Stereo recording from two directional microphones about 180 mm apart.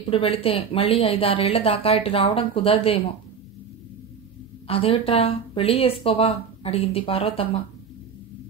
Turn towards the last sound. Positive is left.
turn(degrees=30)  # may be behind; listen again after turning